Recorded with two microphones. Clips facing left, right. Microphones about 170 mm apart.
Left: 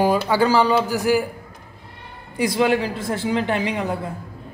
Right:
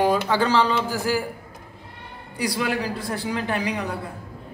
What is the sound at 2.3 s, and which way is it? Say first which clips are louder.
A man's voice: left 6 dB; 20° left (ahead or behind).